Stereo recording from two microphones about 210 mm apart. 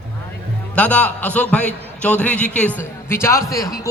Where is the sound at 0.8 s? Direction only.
5° left (ahead or behind).